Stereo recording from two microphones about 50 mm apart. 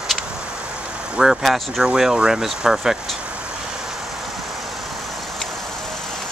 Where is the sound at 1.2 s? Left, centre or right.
Centre.